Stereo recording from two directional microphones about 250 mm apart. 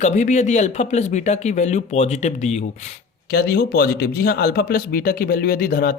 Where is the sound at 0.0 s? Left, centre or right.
Left.